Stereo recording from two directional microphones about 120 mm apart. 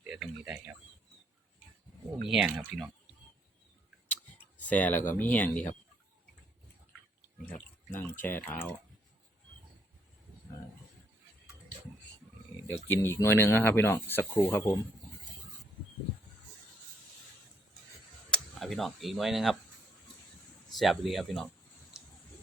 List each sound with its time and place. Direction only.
0.1 s a sound: 5° right (ahead or behind)
2.2 s speech: 5° right (ahead or behind)
4.1 s a sound: 15° left (ahead or behind)
5.1 s speech: 15° left (ahead or behind)
7.9 s speech: 15° left (ahead or behind)
12.6 s speech: 20° left (ahead or behind)
18.3 s speech: centre (ahead or behind)
20.7 s speech: centre (ahead or behind)
22.0 s a sound: 5° right (ahead or behind)